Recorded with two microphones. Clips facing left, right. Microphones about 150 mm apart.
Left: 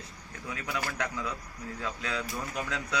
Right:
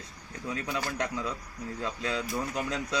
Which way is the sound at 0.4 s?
25° right (ahead or behind).